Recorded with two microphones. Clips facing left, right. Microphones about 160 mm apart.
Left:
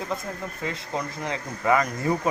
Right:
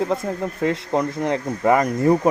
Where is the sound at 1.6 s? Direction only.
45° right (ahead or behind).